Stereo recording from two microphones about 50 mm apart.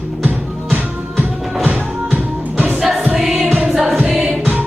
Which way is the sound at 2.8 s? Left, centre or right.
Centre.